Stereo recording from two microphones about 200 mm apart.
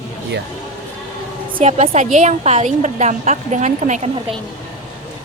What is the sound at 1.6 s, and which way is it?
A woman's voice, 35° right (ahead or behind).